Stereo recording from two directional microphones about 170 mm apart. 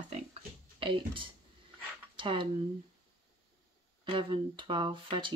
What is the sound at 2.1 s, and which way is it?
Speech, 30° right (ahead or behind).